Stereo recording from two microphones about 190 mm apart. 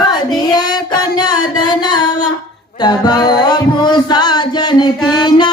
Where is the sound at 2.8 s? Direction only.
20° left (ahead or behind).